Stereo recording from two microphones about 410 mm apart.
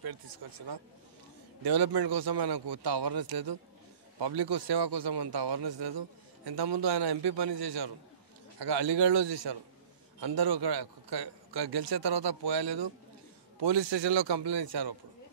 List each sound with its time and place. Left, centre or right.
0.0 s a man's voice: right
1.6 s a man's voice: right
4.2 s a man's voice: right
10.2 s a man's voice: right